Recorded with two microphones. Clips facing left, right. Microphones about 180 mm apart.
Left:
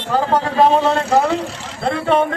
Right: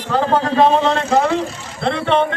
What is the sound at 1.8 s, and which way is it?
Speech, 10° left (ahead or behind).